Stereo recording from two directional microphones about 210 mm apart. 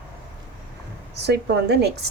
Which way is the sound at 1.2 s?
50° right (ahead or behind).